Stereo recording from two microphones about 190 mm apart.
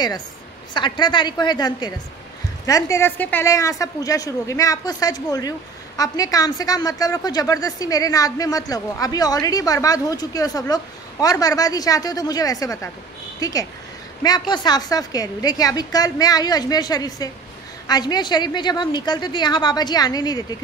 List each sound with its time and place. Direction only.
0.7 s a woman's voice: 25° left (ahead or behind)